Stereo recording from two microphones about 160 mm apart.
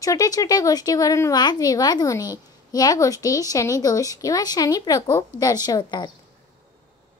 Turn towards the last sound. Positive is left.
turn(degrees=25)  # may be behind; listen again after turning